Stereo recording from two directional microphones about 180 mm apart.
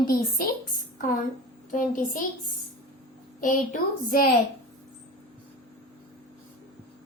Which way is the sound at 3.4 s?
50° left (ahead or behind).